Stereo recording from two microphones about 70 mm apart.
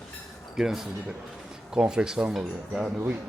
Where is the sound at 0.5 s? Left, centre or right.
Centre.